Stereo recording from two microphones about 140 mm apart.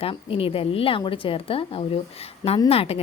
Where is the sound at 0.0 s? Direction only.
40° left (ahead or behind).